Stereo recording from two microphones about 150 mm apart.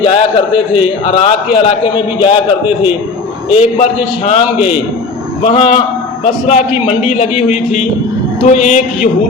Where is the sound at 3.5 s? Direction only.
45° left (ahead or behind).